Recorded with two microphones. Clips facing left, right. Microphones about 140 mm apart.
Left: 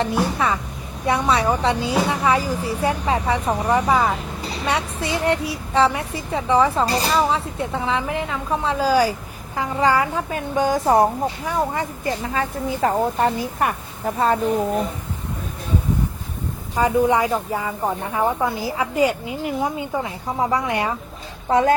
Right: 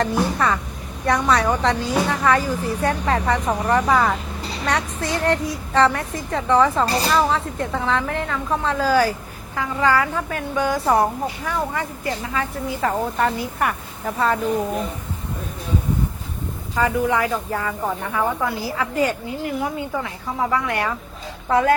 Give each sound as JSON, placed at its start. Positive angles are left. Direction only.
{"t": 0.0, "sound": "a woman's voice", "side_deg": 5}
{"t": 16.7, "sound": "a woman's voice", "side_deg": 20}
{"t": 18.1, "sound": "a woman's voice", "side_deg": 25}